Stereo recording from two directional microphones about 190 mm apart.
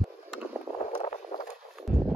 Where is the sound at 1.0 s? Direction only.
35° left (ahead or behind).